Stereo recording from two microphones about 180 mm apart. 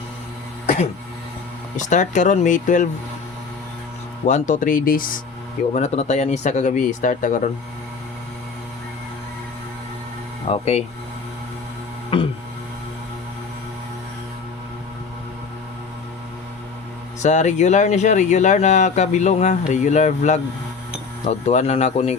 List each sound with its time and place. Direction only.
1.7 s speech: 40° left (ahead or behind)
4.3 s speech: 45° left (ahead or behind)
5.7 s speech: 40° left (ahead or behind)
10.5 s speech: 35° left (ahead or behind)
12.1 s a sound: 30° left (ahead or behind)
17.2 s speech: 40° left (ahead or behind)